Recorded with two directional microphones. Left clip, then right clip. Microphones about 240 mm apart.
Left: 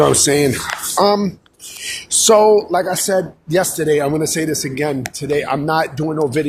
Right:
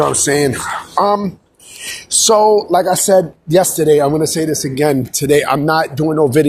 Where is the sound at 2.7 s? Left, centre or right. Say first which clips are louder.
Right 5 dB; centre.